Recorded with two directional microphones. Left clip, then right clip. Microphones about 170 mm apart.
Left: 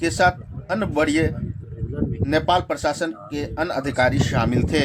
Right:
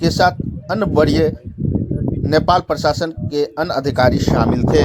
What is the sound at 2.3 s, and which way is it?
Speech, 35° right (ahead or behind).